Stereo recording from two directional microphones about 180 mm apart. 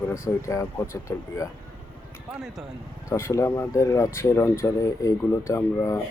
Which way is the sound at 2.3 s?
Centre (ahead or behind).